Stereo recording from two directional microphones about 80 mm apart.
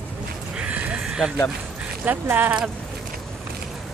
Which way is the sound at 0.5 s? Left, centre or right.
Centre.